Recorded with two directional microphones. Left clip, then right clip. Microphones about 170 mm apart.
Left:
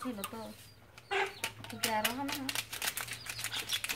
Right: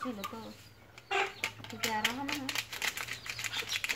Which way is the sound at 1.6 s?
Centre (ahead or behind).